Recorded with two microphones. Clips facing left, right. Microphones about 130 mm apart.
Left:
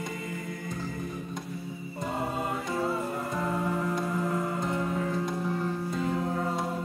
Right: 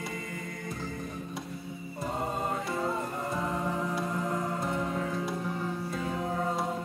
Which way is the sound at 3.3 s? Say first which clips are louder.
Left 2 dB; centre (ahead or behind).